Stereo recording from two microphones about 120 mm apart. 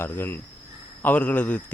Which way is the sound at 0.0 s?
15° left (ahead or behind).